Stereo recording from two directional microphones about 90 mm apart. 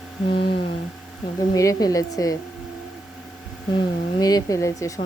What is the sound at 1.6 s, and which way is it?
Speech, 40° left (ahead or behind).